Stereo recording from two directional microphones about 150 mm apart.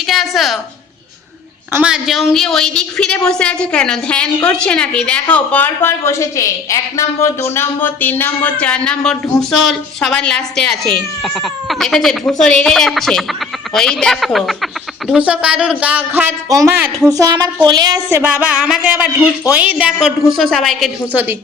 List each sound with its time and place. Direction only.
0.0 s a woman's voice: centre (ahead or behind)
1.7 s a woman's voice: 5° right (ahead or behind)
17.1 s speech: 25° right (ahead or behind)
18.2 s speech: 10° right (ahead or behind)